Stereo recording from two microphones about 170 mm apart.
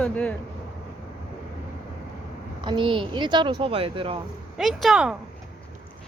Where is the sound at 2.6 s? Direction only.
30° right (ahead or behind).